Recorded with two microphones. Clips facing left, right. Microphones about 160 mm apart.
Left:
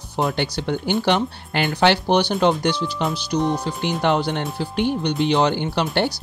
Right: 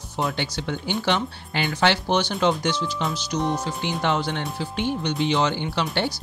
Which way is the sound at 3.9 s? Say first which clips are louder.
Left 4 dB; 60° left (ahead or behind).